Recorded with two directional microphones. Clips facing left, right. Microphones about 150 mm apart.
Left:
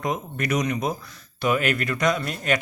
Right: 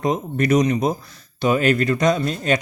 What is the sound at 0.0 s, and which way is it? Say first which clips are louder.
Speech: right 6 dB; 30° right (ahead or behind).